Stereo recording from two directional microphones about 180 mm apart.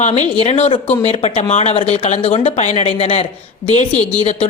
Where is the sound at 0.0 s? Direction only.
40° left (ahead or behind).